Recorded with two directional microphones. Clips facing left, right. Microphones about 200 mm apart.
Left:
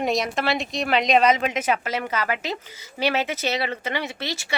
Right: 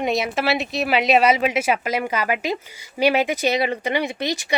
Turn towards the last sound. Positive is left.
turn(degrees=-15)  # may be behind; listen again after turning